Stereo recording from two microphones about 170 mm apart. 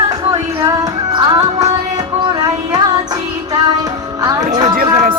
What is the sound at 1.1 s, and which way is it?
Music, 20° right (ahead or behind).